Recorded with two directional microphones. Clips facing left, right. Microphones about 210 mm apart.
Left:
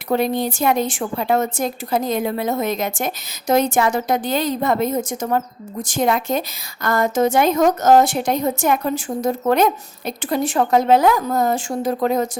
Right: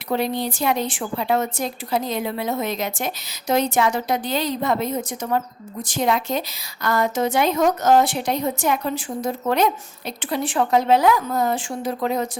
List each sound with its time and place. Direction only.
0.1 s a woman's voice: 50° left (ahead or behind)